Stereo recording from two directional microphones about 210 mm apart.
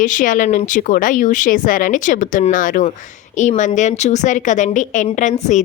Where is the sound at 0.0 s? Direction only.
40° left (ahead or behind).